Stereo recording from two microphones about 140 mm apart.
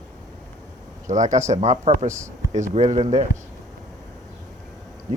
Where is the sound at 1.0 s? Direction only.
60° right (ahead or behind).